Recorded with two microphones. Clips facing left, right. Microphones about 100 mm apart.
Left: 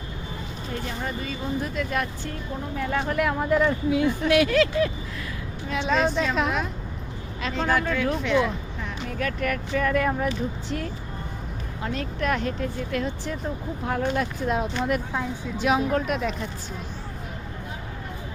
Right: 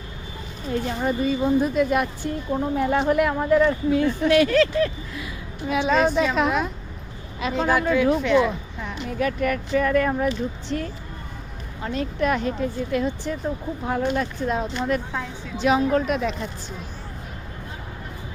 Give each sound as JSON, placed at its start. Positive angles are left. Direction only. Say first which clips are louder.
{"t": 0.9, "sound": "speech", "louder": "right 10 dB", "side_deg": -15}
{"t": 3.2, "sound": "speech", "louder": "even", "side_deg": 0}
{"t": 5.6, "sound": "speech", "louder": "right 4 dB", "side_deg": -5}